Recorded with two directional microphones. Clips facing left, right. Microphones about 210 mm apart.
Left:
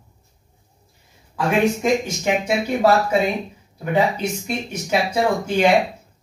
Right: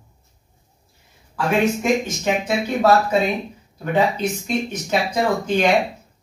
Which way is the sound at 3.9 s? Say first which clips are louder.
Even; 10° left (ahead or behind).